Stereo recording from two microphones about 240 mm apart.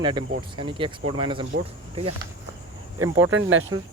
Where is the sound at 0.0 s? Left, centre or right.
Centre.